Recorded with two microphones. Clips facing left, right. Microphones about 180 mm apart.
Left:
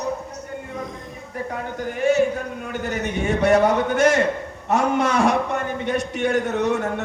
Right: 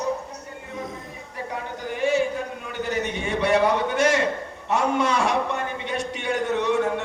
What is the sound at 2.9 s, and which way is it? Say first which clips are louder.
A man's voice: left 3 dB; 45° left (ahead or behind).